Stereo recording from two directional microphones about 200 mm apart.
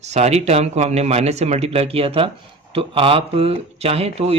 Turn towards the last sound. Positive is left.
turn(degrees=-30)  # may be behind; listen again after turning